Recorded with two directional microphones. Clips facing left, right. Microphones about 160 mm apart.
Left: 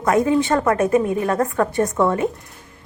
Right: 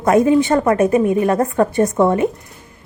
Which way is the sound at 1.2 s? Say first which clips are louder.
Right 4 dB; 25° right (ahead or behind).